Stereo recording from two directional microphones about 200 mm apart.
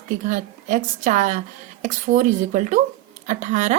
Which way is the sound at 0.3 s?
40° right (ahead or behind).